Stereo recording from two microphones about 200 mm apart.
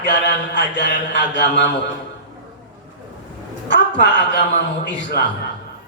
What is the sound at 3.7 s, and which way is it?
A man's voice, 60° left (ahead or behind).